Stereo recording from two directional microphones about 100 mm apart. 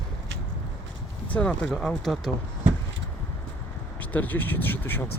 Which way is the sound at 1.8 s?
Centre (ahead or behind).